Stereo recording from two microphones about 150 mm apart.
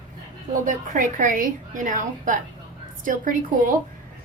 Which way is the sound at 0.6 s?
60° right (ahead or behind).